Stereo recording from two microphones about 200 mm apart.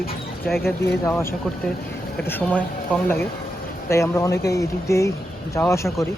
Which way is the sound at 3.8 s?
15° left (ahead or behind).